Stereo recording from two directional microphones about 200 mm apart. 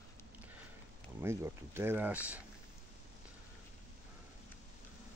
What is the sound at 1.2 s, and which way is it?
Speech, 15° right (ahead or behind).